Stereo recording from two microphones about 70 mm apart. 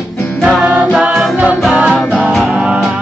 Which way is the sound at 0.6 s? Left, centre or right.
Centre.